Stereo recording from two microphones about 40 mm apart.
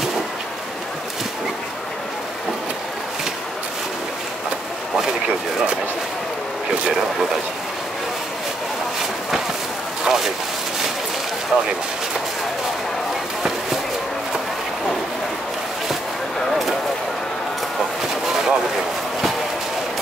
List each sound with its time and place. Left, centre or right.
10.0 s speech: centre
11.5 s speech: right
18.3 s a sound: centre